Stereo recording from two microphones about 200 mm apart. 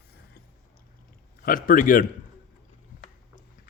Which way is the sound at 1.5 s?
45° left (ahead or behind).